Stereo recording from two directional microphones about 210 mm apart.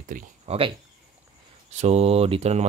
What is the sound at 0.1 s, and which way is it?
Speech, 40° right (ahead or behind).